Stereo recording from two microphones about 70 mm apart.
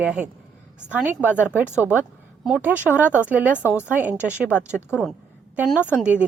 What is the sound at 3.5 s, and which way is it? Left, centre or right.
Speech, left.